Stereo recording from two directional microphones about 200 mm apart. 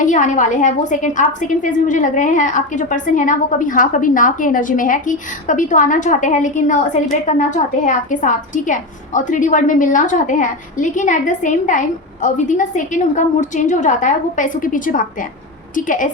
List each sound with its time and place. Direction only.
0.0 s a woman's voice: 40° left (ahead or behind)